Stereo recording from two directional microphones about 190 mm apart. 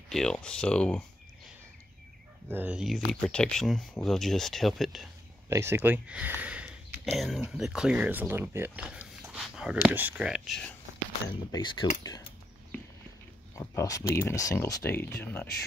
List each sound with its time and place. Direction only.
0.1 s speech: 5° left (ahead or behind)
2.4 s speech: 10° right (ahead or behind)
5.5 s speech: 15° right (ahead or behind); by 10.8 s 5° left (ahead or behind)
11.5 s speech: 25° left (ahead or behind)
13.6 s speech: 15° left (ahead or behind)